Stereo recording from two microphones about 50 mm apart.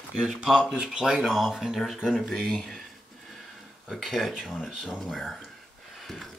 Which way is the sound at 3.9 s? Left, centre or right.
Centre.